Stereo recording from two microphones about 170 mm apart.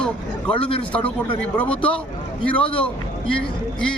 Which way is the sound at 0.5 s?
30° left (ahead or behind).